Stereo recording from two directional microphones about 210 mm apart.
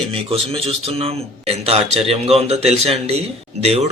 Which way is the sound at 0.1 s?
25° right (ahead or behind).